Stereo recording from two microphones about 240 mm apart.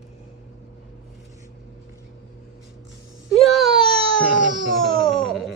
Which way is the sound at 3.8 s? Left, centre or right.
Right.